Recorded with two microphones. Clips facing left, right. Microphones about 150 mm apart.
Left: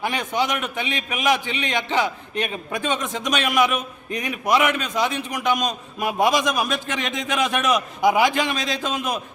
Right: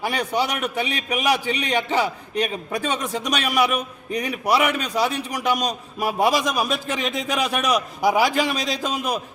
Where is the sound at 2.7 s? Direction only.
35° right (ahead or behind).